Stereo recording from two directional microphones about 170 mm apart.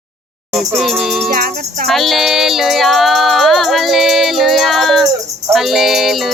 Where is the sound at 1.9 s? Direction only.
Centre (ahead or behind).